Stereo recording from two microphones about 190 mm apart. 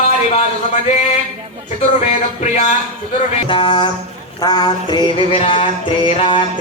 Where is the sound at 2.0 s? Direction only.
40° left (ahead or behind).